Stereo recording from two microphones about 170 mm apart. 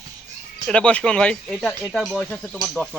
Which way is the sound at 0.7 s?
5° left (ahead or behind).